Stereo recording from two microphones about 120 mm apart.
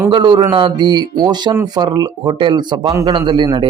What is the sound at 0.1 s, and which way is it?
Speech, 40° right (ahead or behind).